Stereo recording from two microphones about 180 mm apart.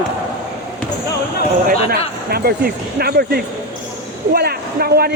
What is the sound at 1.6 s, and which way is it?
Speech, 60° right (ahead or behind).